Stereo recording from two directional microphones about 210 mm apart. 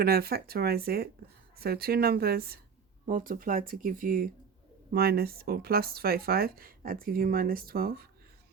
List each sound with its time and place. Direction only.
0.0 s speech: 45° right (ahead or behind)